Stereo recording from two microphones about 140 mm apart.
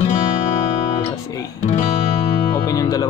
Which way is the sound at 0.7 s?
50° left (ahead or behind).